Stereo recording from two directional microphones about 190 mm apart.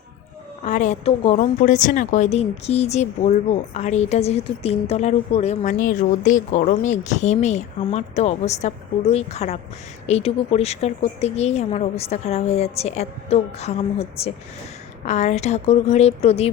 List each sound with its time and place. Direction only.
0.6 s a woman's voice: 40° left (ahead or behind)